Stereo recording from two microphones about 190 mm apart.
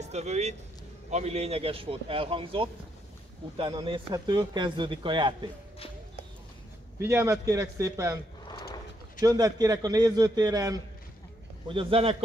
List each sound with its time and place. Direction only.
0.0 s speech: 35° right (ahead or behind)
7.0 s a man's voice: 15° right (ahead or behind)
9.2 s speech: 20° right (ahead or behind)